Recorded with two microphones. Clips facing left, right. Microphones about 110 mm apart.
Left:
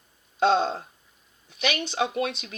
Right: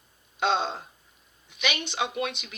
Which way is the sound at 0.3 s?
35° left (ahead or behind).